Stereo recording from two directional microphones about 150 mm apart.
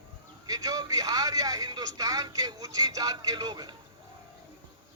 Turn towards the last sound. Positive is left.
turn(degrees=-25)  # may be behind; listen again after turning